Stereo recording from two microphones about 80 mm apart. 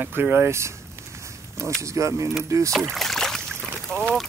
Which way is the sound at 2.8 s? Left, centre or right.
Centre.